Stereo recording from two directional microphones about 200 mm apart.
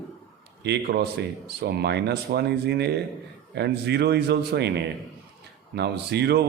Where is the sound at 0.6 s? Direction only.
55° right (ahead or behind).